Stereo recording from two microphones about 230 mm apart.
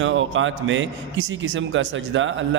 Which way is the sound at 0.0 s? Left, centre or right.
Right.